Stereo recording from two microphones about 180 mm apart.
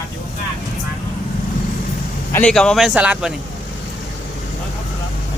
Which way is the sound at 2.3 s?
5° left (ahead or behind).